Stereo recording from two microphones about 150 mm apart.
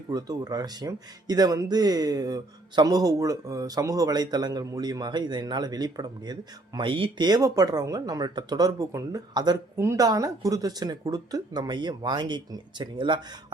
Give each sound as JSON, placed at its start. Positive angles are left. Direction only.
{"t": 0.1, "sound": "speech", "side_deg": -25}